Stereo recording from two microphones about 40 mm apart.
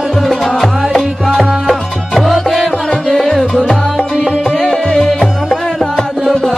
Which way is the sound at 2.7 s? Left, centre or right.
Centre.